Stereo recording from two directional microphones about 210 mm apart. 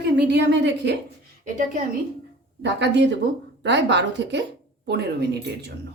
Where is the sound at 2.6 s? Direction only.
55° right (ahead or behind).